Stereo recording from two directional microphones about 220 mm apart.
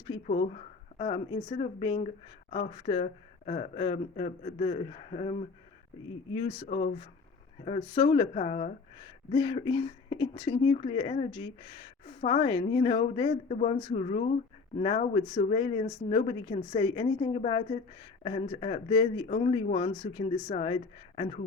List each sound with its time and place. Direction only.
0.3 s speech: 30° left (ahead or behind)